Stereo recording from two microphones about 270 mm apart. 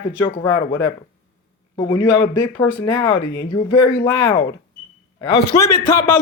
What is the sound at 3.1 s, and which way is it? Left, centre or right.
Speech, left.